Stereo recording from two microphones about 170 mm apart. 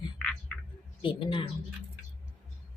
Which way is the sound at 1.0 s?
30° left (ahead or behind).